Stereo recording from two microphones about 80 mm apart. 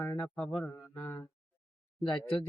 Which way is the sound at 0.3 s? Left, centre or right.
Centre.